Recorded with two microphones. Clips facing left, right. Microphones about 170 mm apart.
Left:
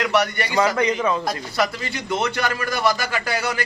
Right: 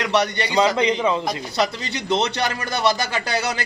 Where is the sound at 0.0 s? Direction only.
25° right (ahead or behind).